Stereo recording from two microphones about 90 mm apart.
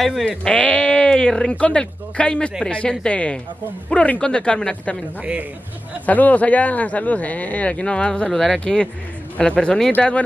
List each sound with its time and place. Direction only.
0.0 s speech: centre (ahead or behind)
0.4 s speech: 15° left (ahead or behind)
5.2 s speech: 15° right (ahead or behind)
6.0 s speech: 20° left (ahead or behind)